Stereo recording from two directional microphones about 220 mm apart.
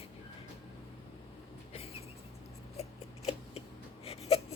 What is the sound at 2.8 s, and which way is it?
Scissors, 30° left (ahead or behind).